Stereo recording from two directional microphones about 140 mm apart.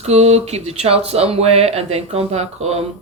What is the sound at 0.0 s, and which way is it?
Speech, 50° right (ahead or behind).